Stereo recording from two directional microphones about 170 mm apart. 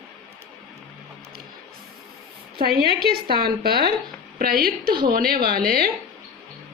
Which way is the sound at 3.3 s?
65° right (ahead or behind).